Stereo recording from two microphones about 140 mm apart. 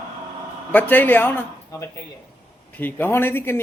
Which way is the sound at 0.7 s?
10° left (ahead or behind).